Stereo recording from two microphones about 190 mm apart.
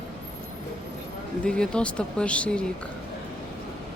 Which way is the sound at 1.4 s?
5° left (ahead or behind).